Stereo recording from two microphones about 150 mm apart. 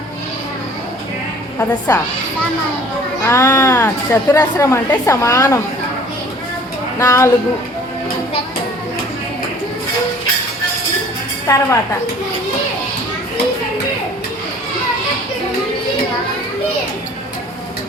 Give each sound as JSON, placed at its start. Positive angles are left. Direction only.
{"t": 1.9, "sound": "speech", "side_deg": 20}
{"t": 3.2, "sound": "speech", "side_deg": 20}
{"t": 7.0, "sound": "speech", "side_deg": 20}
{"t": 11.4, "sound": "speech", "side_deg": 20}